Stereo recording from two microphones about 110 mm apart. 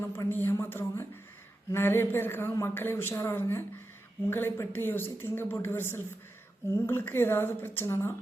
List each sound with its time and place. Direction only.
0.1 s speech: 20° left (ahead or behind)